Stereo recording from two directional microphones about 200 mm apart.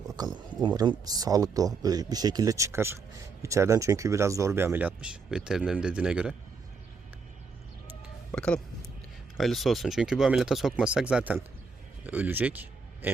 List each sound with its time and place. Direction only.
0.2 s speech: 20° right (ahead or behind)
8.3 s speech: 5° left (ahead or behind)